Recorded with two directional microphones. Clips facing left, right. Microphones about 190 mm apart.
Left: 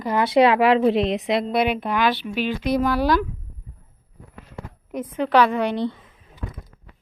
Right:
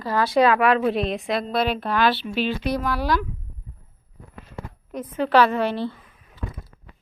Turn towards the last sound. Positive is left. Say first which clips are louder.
# left 3 dB
turn(degrees=20)  # may be behind; listen again after turning